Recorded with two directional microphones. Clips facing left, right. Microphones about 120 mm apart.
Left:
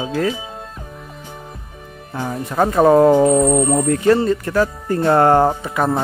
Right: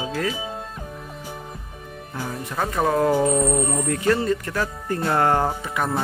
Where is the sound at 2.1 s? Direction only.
55° left (ahead or behind).